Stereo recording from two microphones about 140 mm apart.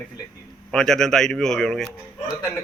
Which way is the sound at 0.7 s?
5° left (ahead or behind).